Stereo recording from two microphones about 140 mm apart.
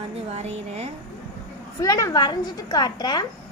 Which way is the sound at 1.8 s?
25° left (ahead or behind).